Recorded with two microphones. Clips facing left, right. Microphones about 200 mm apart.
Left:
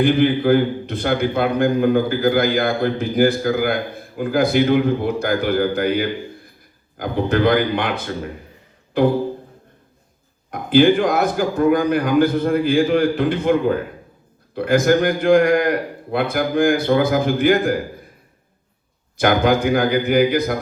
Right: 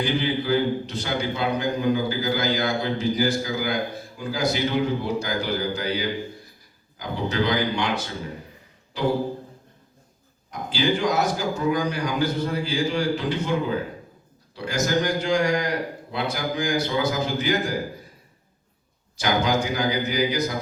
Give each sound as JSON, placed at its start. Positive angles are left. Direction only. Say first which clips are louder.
{"t": 0.0, "sound": "a man's voice", "louder": "left 9 dB", "side_deg": 55}
{"t": 10.5, "sound": "a man's voice", "louder": "left 11 dB", "side_deg": 55}
{"t": 19.1, "sound": "a man's voice", "louder": "left 7 dB", "side_deg": 55}